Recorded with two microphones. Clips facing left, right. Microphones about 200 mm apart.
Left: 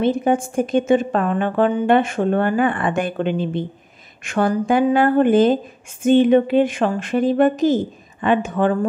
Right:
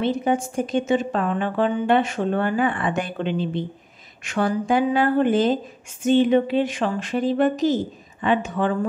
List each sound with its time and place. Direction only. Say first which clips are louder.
0.0 s a woman's voice: left 4 dB; 50° left (ahead or behind)